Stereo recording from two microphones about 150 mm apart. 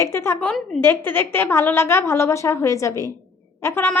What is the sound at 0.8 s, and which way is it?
A woman's voice, 15° left (ahead or behind).